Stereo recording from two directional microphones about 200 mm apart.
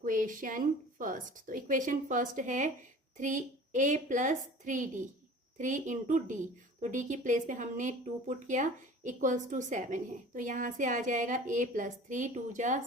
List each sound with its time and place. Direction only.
0.0 s speech: 40° right (ahead or behind)